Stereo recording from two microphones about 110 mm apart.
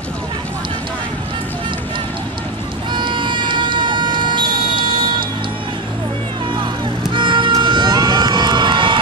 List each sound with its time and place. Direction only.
2.9 s air horn: 45° right (ahead or behind)
7.1 s music: 50° right (ahead or behind)
7.6 s crowd: 45° right (ahead or behind)